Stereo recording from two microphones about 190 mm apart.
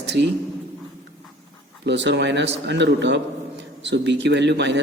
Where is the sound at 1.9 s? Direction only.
65° right (ahead or behind).